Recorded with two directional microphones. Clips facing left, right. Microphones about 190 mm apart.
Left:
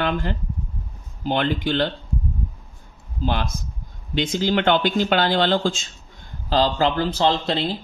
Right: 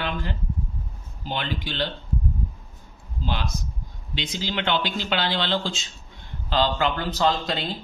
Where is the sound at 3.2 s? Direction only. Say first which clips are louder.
Left 5 dB; 50° left (ahead or behind).